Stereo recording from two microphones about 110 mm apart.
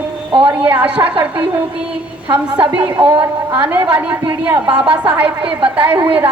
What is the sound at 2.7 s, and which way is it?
Speech, 50° right (ahead or behind).